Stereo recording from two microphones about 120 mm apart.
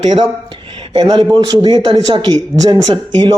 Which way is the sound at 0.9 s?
40° right (ahead or behind).